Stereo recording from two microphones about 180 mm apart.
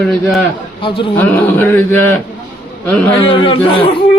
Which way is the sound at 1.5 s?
10° left (ahead or behind).